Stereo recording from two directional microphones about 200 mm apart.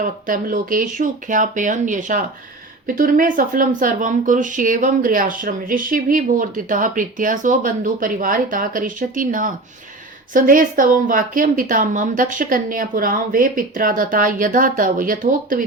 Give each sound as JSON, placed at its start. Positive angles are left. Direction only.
{"t": 0.0, "sound": "speech", "side_deg": -40}